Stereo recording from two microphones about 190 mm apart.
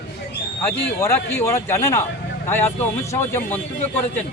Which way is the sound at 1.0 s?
15° left (ahead or behind).